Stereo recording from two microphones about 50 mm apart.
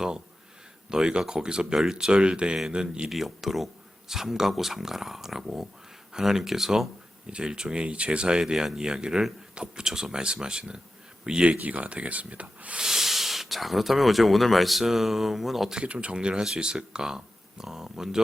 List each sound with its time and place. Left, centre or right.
0.9 s speech: centre
3.1 s speech: centre
7.3 s speech: centre
12.8 s speech: centre
15.7 s speech: right